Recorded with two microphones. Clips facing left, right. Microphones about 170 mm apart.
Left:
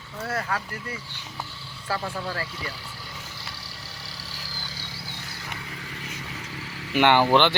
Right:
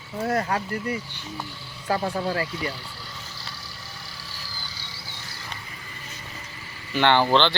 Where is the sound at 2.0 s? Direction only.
35° right (ahead or behind).